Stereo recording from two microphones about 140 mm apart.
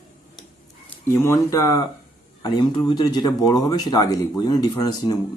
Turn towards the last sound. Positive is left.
turn(degrees=30)  # may be behind; listen again after turning